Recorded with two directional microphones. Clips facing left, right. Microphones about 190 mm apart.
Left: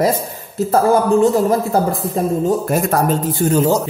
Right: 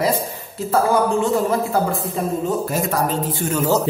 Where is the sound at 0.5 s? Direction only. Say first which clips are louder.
Left 4 dB; 40° left (ahead or behind).